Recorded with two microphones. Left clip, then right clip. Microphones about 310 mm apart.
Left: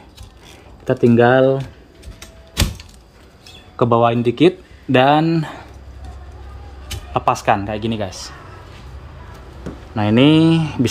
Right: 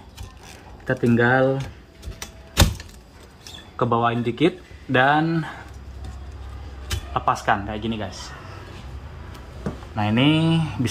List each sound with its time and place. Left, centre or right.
0.8 s speech: left
3.7 s speech: left
7.2 s speech: left
9.9 s speech: left